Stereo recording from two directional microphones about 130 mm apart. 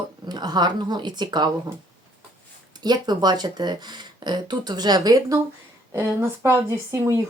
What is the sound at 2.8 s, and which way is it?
Speech, 30° right (ahead or behind).